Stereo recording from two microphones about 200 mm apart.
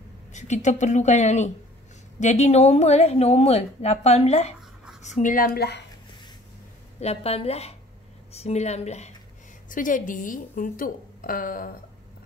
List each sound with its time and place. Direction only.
0.3 s a woman's voice: 35° left (ahead or behind); by 5.9 s 55° left (ahead or behind)
7.0 s a woman's voice: 30° left (ahead or behind)